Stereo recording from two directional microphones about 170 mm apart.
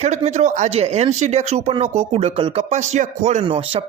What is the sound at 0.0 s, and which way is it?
Speech, 40° right (ahead or behind).